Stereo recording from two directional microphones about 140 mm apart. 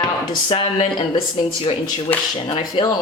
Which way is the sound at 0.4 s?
35° left (ahead or behind).